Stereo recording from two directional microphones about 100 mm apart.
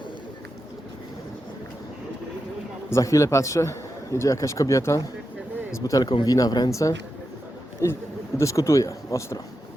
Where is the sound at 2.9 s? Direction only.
30° left (ahead or behind).